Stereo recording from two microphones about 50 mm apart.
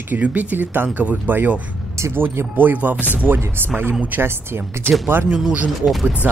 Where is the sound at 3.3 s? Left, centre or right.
Right.